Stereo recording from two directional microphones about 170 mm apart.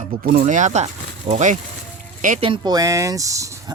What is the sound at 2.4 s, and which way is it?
Speech, 30° right (ahead or behind).